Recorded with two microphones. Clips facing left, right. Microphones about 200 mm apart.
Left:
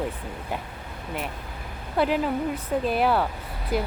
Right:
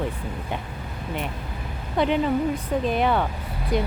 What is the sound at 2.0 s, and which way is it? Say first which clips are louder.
Speech: right 2 dB; 5° left (ahead or behind).